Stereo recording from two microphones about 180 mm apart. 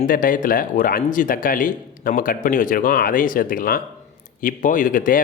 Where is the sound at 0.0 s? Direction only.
50° left (ahead or behind).